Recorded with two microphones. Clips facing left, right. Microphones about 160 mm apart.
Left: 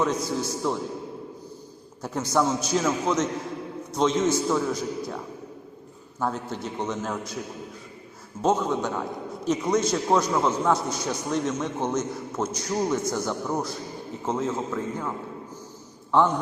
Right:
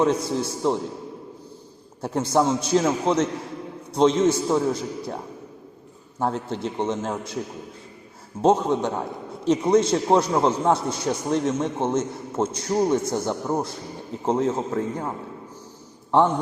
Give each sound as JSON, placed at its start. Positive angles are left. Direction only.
{"t": 0.0, "sound": "a man's voice", "side_deg": -30}
{"t": 2.0, "sound": "a man's voice", "side_deg": -30}
{"t": 8.4, "sound": "a man's voice", "side_deg": -30}